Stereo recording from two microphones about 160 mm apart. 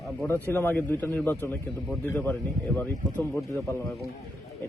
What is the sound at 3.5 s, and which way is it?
Speech, 15° left (ahead or behind).